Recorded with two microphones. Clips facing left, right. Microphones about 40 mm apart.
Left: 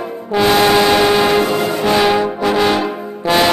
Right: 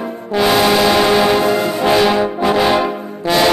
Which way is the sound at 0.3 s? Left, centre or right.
Centre.